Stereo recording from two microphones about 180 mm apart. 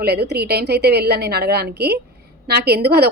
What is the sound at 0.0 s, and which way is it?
A woman's voice, 65° right (ahead or behind).